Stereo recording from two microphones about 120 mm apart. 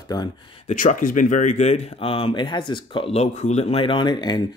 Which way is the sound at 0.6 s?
90° left.